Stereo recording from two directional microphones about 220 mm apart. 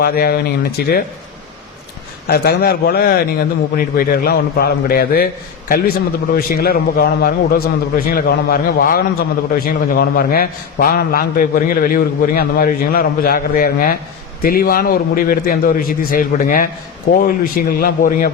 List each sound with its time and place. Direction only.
0.0 s a man's voice: 45° left (ahead or behind)
2.2 s a man's voice: 45° left (ahead or behind)